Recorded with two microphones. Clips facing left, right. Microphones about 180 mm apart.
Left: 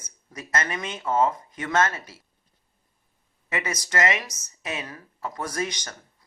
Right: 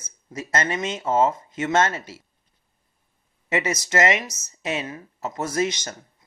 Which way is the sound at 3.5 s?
25° right (ahead or behind).